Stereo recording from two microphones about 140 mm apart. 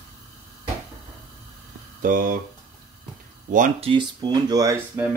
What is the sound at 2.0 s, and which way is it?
Speech, 80° right.